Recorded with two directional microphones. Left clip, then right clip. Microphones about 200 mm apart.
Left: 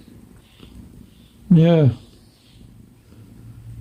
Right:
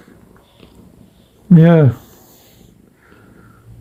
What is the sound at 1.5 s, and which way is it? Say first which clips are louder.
Speech: right 5 dB; centre (ahead or behind).